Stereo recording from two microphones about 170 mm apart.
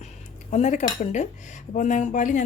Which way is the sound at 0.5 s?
45° left (ahead or behind).